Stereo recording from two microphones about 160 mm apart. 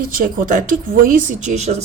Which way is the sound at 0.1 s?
60° right (ahead or behind).